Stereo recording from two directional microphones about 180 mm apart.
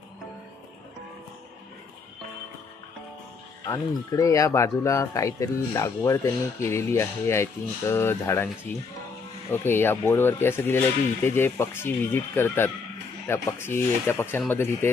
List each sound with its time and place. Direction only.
3.6 s speech: 20° left (ahead or behind)